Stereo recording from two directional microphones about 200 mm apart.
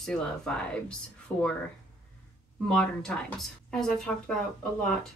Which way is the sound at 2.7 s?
5° left (ahead or behind).